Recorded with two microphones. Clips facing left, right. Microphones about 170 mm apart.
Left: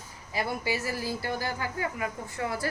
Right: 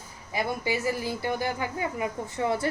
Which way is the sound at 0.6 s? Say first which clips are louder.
Right 3 dB; 20° right (ahead or behind).